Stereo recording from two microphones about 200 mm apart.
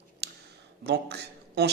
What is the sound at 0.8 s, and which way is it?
Speech, 55° right (ahead or behind).